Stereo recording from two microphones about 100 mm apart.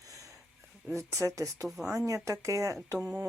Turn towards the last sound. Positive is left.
turn(degrees=-5)  # may be behind; listen again after turning